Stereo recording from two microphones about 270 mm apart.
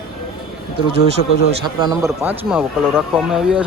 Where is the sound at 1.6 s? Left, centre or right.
Centre.